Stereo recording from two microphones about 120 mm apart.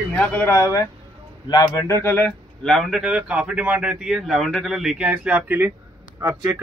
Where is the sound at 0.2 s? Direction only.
20° left (ahead or behind).